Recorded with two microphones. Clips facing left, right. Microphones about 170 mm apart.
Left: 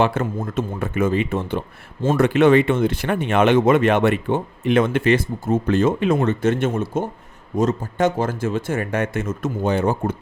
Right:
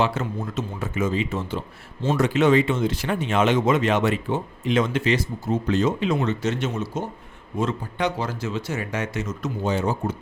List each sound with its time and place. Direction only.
0.0 s speech: 55° left (ahead or behind)
7.5 s speech: 40° left (ahead or behind); by 10.2 s 55° left (ahead or behind)